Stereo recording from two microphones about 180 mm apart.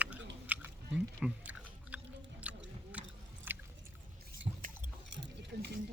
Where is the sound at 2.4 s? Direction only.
10° right (ahead or behind).